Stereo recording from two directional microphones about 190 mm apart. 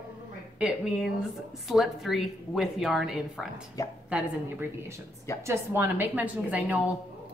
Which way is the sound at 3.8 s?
20° left (ahead or behind).